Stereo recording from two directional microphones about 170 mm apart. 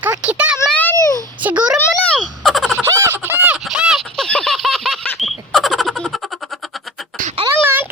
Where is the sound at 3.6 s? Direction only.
5° right (ahead or behind).